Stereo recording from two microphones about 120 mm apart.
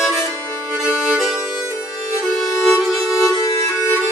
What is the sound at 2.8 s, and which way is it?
Music, centre (ahead or behind).